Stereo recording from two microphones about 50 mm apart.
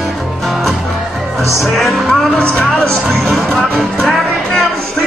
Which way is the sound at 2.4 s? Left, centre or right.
Centre.